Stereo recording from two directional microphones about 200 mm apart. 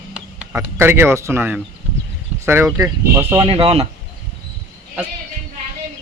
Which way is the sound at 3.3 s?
25° right (ahead or behind).